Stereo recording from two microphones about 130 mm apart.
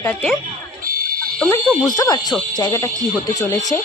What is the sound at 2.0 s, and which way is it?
Speech, 30° left (ahead or behind).